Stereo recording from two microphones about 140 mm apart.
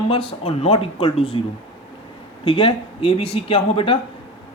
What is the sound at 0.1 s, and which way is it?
A man's voice, 40° left (ahead or behind).